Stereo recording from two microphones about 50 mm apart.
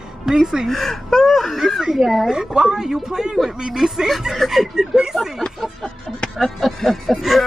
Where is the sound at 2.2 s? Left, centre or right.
Centre.